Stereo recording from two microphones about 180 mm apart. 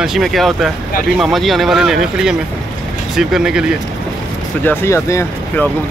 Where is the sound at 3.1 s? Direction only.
5° right (ahead or behind).